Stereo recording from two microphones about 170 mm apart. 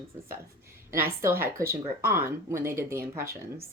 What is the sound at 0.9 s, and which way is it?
Speech, 15° right (ahead or behind).